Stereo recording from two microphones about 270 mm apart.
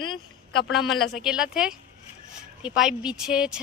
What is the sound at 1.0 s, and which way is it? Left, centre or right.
Speech, centre.